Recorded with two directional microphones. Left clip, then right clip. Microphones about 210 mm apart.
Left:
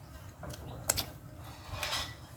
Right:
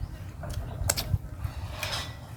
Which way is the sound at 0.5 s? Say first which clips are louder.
Right 3 dB; centre (ahead or behind).